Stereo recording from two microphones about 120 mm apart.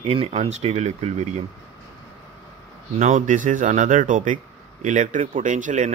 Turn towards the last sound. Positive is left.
turn(degrees=-90)